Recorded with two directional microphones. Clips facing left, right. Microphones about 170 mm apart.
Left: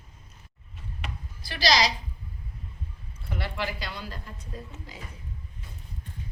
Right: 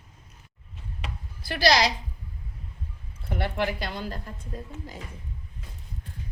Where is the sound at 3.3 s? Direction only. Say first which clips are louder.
Right 5 dB; 55° right (ahead or behind).